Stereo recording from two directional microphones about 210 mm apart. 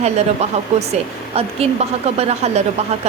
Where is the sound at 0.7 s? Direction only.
35° right (ahead or behind).